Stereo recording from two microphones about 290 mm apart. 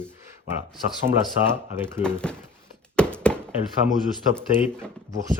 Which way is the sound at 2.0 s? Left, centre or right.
Centre.